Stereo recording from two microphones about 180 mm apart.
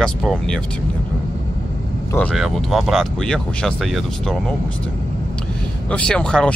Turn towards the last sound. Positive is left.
turn(degrees=5)  # may be behind; listen again after turning